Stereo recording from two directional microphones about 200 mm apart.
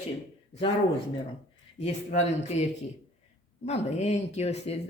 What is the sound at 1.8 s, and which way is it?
Speech, 35° left (ahead or behind).